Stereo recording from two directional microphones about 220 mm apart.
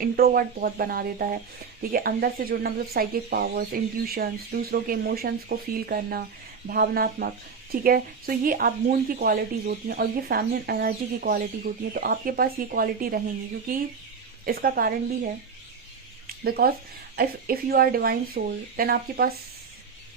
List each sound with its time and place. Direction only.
0.0 s speech: 40° right (ahead or behind)
14.4 s speech: 40° right (ahead or behind)
16.2 s a sound: 45° right (ahead or behind)
17.2 s speech: 45° right (ahead or behind)